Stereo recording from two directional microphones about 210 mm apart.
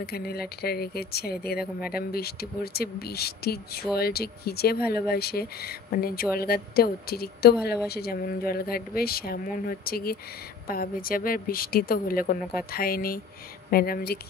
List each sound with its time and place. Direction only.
0.0 s speech: 45° left (ahead or behind)